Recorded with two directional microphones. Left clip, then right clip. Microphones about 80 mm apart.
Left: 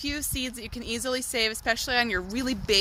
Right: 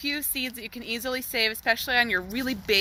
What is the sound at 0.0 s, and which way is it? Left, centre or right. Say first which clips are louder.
Speech: right 2 dB; left.